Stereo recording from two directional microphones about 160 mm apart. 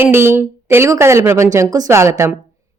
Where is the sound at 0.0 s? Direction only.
15° right (ahead or behind).